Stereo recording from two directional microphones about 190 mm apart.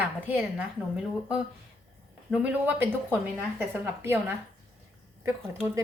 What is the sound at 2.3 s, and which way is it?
A woman's voice, 10° right (ahead or behind).